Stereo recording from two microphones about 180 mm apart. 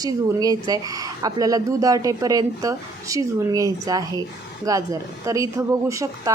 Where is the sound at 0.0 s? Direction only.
20° right (ahead or behind).